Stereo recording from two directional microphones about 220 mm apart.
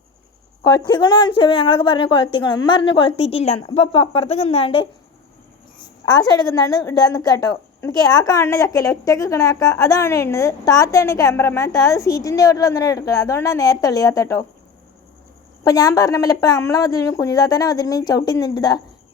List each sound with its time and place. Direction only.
0.6 s a woman's voice: 20° left (ahead or behind)
6.1 s a woman's voice: 20° left (ahead or behind)
15.6 s a woman's voice: 15° left (ahead or behind)